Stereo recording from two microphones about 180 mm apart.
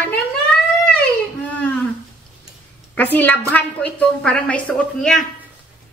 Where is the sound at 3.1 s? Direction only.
10° left (ahead or behind).